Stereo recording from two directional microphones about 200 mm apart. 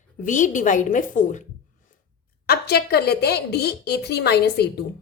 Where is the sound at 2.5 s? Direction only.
55° left (ahead or behind).